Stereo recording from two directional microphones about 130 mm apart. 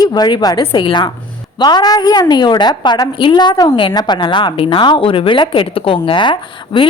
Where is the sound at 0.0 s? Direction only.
30° left (ahead or behind).